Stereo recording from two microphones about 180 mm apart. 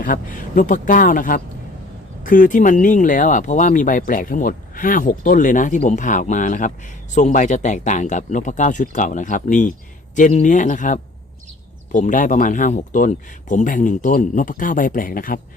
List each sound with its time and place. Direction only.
0.0 s speech: 50° left (ahead or behind)